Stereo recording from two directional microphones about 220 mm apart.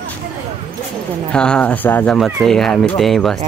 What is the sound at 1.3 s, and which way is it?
Speech, 5° left (ahead or behind).